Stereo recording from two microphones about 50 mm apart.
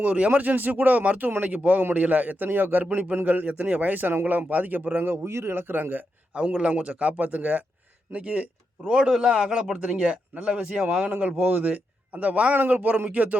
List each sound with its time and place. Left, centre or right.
0.0 s a man's voice: right
2.9 s a man's voice: right
5.1 s a man's voice: right
6.3 s speech: right
8.9 s a man's voice: centre
11.0 s a man's voice: right